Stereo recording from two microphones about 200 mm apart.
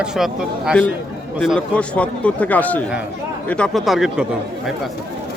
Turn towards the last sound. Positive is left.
turn(degrees=-5)  # may be behind; listen again after turning